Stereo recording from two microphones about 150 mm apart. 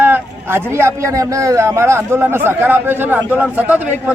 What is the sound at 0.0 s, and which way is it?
A man's voice, 15° right (ahead or behind).